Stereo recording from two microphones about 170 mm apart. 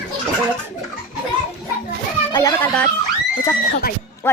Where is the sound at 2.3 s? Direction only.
20° left (ahead or behind).